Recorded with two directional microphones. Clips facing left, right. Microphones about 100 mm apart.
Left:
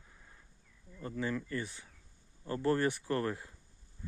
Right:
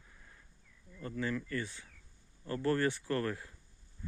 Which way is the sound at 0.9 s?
25° left (ahead or behind).